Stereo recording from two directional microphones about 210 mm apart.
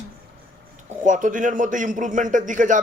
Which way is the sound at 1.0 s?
35° right (ahead or behind).